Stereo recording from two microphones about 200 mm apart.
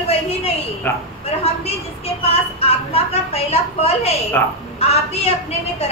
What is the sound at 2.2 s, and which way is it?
A woman's voice, 30° left (ahead or behind).